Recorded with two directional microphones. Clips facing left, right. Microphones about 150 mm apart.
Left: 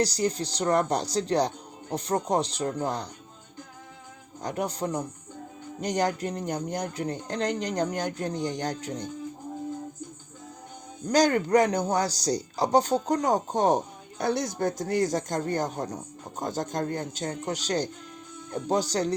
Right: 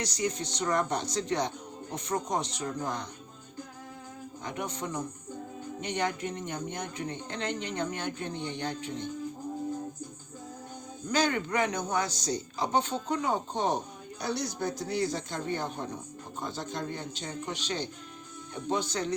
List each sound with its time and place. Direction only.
0.0 s speech: 35° left (ahead or behind)
4.4 s speech: 35° left (ahead or behind)
11.1 s speech: 40° left (ahead or behind)